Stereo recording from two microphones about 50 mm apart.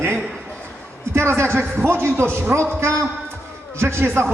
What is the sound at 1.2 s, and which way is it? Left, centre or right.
A man's voice, right.